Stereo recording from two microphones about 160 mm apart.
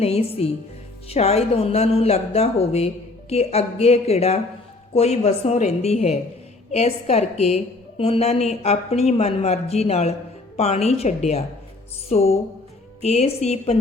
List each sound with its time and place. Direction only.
0.0 s a woman's voice: 40° left (ahead or behind)